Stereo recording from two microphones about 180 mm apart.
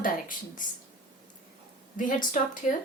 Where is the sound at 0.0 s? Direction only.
50° left (ahead or behind).